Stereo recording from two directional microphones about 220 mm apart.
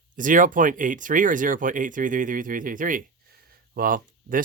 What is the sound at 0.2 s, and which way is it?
Speech, 35° right (ahead or behind).